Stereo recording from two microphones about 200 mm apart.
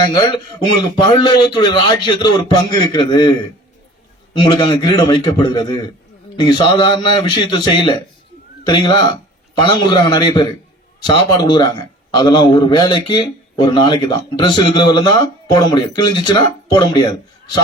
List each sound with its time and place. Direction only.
0.0 s a man's voice: 20° left (ahead or behind)
4.4 s a man's voice: 20° left (ahead or behind)